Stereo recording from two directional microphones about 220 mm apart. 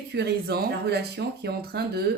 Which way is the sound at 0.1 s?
50° right (ahead or behind).